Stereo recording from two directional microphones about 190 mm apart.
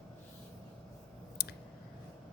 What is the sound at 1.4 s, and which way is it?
Scissors, 55° left (ahead or behind).